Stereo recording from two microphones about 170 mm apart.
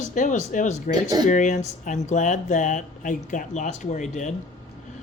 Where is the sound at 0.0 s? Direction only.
45° left (ahead or behind).